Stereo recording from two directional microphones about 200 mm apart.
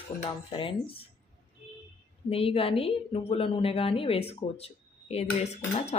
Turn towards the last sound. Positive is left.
turn(degrees=30)  # may be behind; listen again after turning